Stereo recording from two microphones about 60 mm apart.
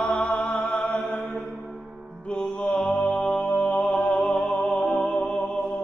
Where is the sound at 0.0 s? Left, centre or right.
Left.